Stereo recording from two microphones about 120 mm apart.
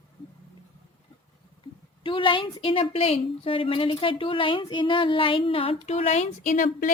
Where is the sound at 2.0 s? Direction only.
45° left (ahead or behind); by 6.7 s 90° left.